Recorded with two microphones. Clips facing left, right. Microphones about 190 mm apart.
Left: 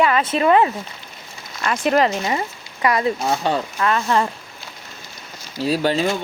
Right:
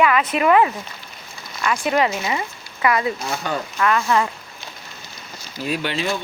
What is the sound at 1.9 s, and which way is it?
Speech, 40° left (ahead or behind).